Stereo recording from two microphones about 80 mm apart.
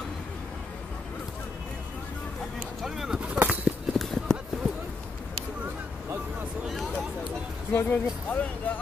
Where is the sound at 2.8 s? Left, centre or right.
Centre.